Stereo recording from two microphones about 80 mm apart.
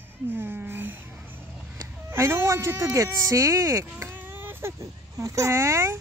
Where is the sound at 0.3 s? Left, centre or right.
Right.